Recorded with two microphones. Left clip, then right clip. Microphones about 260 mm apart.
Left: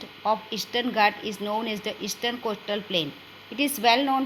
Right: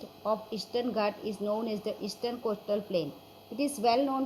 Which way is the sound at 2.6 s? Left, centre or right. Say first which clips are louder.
Left 4 dB; left.